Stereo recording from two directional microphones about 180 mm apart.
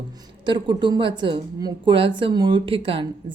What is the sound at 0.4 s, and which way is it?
A woman's voice, 25° right (ahead or behind).